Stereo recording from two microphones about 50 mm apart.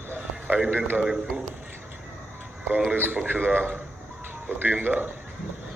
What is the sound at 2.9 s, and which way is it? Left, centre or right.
A man's voice, right.